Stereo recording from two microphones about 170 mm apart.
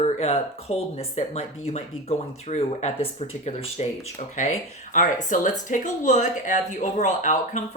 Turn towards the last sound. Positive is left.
turn(degrees=45)  # may be behind; listen again after turning